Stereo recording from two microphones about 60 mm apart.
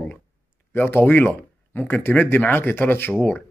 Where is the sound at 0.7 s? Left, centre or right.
Left.